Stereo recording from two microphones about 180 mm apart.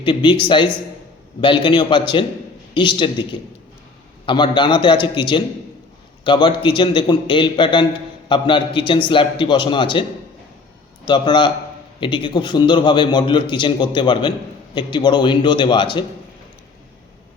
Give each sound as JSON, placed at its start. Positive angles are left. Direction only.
{"t": 0.0, "sound": "a man's voice", "side_deg": 30}
{"t": 4.3, "sound": "a man's voice", "side_deg": 25}
{"t": 11.0, "sound": "a man's voice", "side_deg": 25}